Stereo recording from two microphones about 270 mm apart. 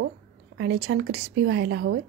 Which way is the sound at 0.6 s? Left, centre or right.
Right.